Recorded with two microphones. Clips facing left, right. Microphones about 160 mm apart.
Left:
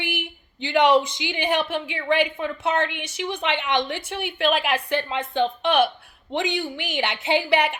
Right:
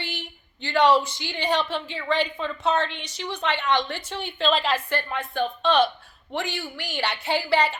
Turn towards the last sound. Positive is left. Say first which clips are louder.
# left 2 dB
turn(degrees=15)  # may be behind; listen again after turning